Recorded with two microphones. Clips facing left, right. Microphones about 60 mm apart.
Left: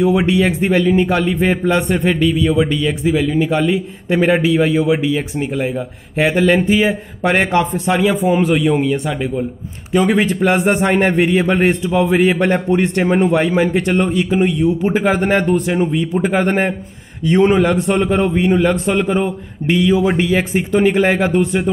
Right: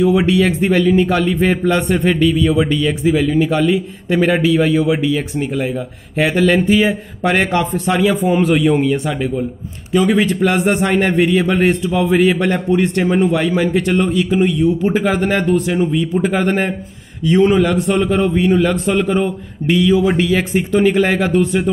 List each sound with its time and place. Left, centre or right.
0.3 s speech: centre
4.1 s speech: centre
10.1 s a man's voice: left
12.2 s a man's voice: left
12.7 s a man's voice: left
14.4 s speech: centre
15.0 s a man's voice: left
17.8 s speech: centre
20.2 s a man's voice: centre